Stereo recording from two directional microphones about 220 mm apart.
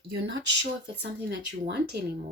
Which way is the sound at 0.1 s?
50° right (ahead or behind).